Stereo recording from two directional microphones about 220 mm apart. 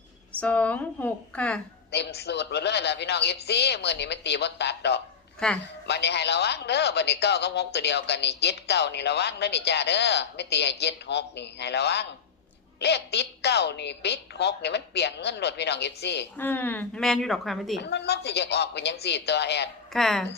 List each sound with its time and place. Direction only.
0.3 s speech: 5° left (ahead or behind)
1.9 s speech: 50° left (ahead or behind)
5.4 s a woman's voice: 5° left (ahead or behind)
5.9 s speech: 50° left (ahead or behind)
16.4 s a woman's voice: 10° left (ahead or behind)
17.7 s speech: 50° left (ahead or behind)
19.9 s a woman's voice: centre (ahead or behind)